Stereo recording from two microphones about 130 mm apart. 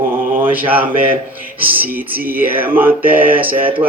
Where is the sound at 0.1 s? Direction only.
15° right (ahead or behind).